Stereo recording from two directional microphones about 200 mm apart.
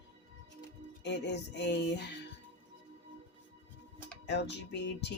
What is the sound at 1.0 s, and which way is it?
Speech, 60° left (ahead or behind).